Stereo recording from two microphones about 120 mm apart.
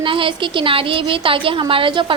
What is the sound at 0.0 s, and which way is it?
A woman's voice, 45° right (ahead or behind).